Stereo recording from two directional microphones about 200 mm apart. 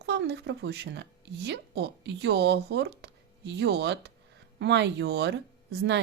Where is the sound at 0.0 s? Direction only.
55° right (ahead or behind).